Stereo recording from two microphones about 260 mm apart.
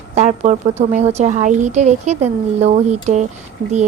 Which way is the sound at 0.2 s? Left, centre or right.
Right.